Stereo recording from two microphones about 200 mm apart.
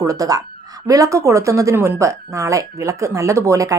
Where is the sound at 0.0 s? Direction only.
15° right (ahead or behind).